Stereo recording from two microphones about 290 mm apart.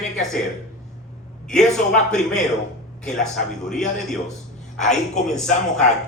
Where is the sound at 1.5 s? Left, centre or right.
Centre.